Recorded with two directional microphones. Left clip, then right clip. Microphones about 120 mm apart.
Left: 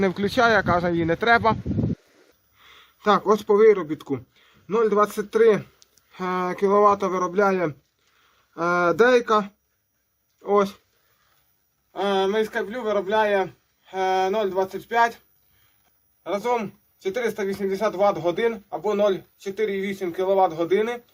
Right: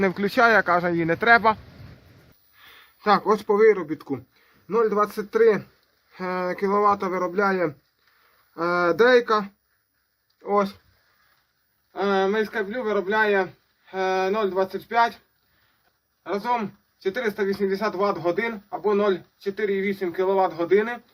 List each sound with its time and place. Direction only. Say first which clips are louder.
0.0 s speech: right 1 dB; 10° left (ahead or behind)
2.6 s a sound: even; 10° left (ahead or behind)
3.4 s speech: left 2 dB; 15° left (ahead or behind)
12.3 s speech: left 1 dB; 40° left (ahead or behind)
13.4 s speech: even; 25° left (ahead or behind)
16.5 s speech: right 1 dB; 35° left (ahead or behind)